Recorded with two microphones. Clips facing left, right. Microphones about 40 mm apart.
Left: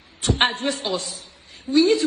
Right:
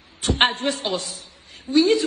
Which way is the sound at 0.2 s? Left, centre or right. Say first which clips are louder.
Right 1 dB; right.